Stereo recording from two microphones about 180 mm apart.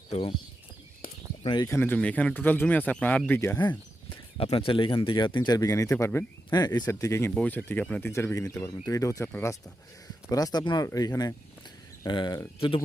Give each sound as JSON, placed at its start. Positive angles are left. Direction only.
{"t": 0.1, "sound": "speech", "side_deg": 30}
{"t": 1.0, "sound": "a sound", "side_deg": 50}
{"t": 1.5, "sound": "speech", "side_deg": 20}
{"t": 4.1, "sound": "speech", "side_deg": 30}